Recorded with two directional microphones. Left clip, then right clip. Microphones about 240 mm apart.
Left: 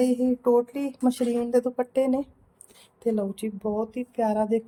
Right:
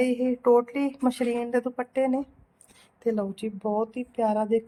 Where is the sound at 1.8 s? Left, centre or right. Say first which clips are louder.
Left 2 dB; centre.